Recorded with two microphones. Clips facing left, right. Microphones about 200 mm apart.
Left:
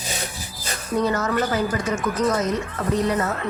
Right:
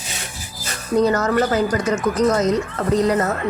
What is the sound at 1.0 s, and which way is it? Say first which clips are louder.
Speech: right 4 dB; 40° right (ahead or behind).